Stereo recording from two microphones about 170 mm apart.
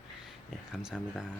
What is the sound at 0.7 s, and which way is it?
Speech, 5° right (ahead or behind).